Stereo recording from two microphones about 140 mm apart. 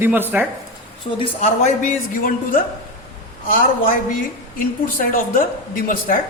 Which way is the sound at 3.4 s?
80° left.